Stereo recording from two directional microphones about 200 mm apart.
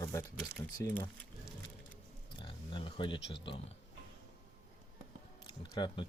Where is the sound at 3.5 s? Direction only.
25° left (ahead or behind).